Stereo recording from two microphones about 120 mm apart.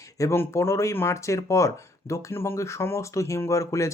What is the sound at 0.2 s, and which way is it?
Speech, 25° left (ahead or behind).